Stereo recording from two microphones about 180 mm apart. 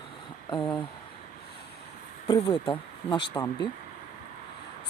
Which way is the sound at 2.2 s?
25° left (ahead or behind).